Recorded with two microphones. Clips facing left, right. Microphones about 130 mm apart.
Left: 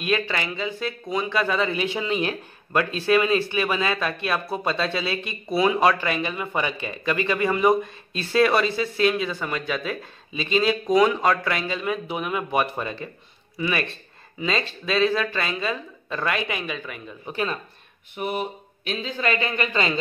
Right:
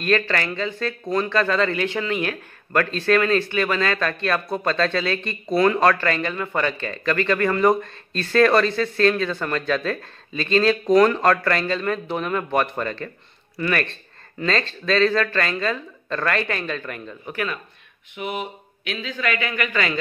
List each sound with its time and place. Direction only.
0.0 s speech: 10° left (ahead or behind)
17.3 s a man's voice: 25° left (ahead or behind)
18.1 s a man's voice: 40° left (ahead or behind)